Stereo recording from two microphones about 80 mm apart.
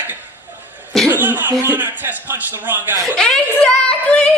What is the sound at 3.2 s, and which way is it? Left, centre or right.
Speech, centre.